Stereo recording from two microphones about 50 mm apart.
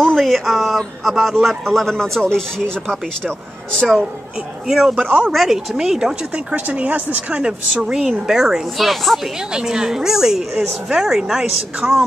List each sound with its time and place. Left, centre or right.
0.0 s speech: centre
4.6 s a woman's voice: centre
6.5 s speech: right
7.8 s a woman's voice: centre
9.4 s a woman's voice: centre